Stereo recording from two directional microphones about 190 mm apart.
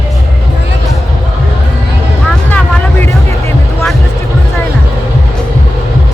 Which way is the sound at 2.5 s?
10° left (ahead or behind).